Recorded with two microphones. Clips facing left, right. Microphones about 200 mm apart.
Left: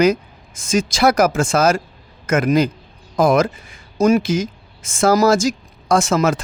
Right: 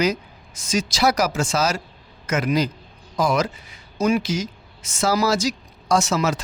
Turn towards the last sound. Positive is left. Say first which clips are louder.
# left 4 dB
turn(degrees=50)  # may be behind; listen again after turning